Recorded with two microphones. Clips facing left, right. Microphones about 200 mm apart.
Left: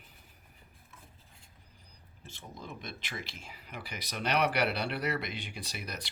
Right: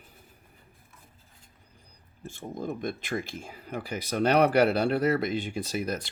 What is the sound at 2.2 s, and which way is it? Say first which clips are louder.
Speech: right 11 dB; 50° right (ahead or behind).